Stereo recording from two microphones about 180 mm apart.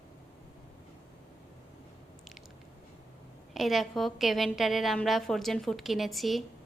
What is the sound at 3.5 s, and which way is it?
A woman's voice, centre (ahead or behind).